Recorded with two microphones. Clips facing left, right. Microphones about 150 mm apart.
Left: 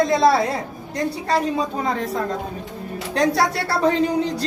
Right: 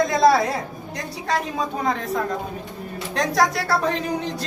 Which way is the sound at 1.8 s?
30° left (ahead or behind).